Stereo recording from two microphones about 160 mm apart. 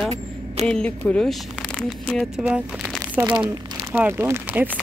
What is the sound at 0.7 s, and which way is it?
Speech, 5° left (ahead or behind).